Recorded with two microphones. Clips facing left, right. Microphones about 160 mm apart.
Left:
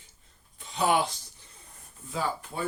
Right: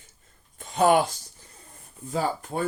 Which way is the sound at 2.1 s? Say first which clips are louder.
Right 5 dB; 45° right (ahead or behind).